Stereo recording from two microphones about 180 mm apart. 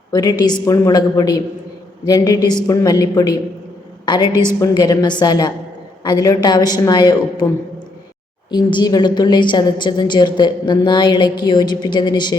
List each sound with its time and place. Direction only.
0.1 s a woman's voice: 20° left (ahead or behind)
8.4 s a woman's voice: 25° left (ahead or behind)